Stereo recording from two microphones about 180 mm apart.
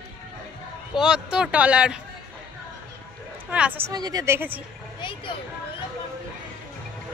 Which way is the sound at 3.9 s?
20° right (ahead or behind).